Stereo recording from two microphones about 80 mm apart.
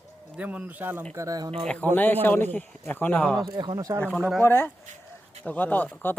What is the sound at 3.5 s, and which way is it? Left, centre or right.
Speech, right.